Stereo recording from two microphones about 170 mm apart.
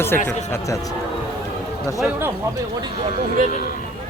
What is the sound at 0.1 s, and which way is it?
Speech, 10° left (ahead or behind).